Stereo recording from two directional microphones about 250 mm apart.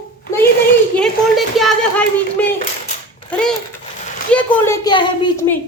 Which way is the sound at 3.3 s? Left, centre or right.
Centre.